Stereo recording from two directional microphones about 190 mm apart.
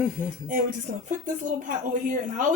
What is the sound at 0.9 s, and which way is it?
Speech, 35° right (ahead or behind).